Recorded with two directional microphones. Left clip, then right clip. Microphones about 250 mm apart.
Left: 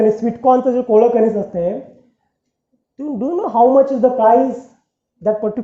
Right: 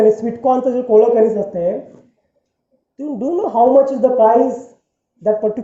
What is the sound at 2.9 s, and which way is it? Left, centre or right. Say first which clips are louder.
Speech: right 1 dB; left.